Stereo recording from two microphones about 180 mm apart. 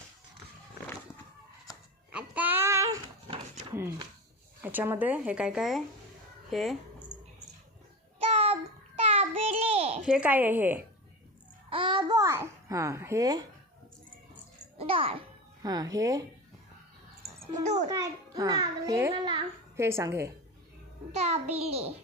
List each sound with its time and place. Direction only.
2.1 s child singing: 10° right (ahead or behind)
3.2 s a sound: 35° right (ahead or behind)
3.7 s speech: 15° right (ahead or behind)
8.3 s child singing: 35° right (ahead or behind)
10.1 s speech: 5° right (ahead or behind)
11.7 s babbling: 25° right (ahead or behind)
14.8 s music: 30° right (ahead or behind)
15.6 s a child's voice: 20° right (ahead or behind)
17.6 s a child's voice: 40° right (ahead or behind)
17.8 s a child's voice: 20° right (ahead or behind)
21.1 s a child's voice: 40° right (ahead or behind)